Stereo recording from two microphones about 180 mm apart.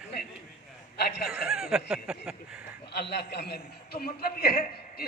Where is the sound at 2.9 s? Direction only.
65° left (ahead or behind).